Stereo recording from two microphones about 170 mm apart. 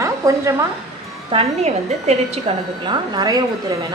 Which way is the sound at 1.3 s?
35° right (ahead or behind).